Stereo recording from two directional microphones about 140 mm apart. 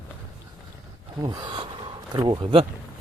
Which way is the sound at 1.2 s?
30° right (ahead or behind).